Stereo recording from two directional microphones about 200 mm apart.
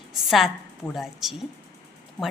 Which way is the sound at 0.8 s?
Centre (ahead or behind).